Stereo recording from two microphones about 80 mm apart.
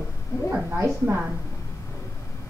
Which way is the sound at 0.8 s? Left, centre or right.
Right.